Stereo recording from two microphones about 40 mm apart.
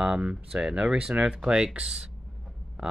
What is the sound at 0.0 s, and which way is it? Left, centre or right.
Speech, centre.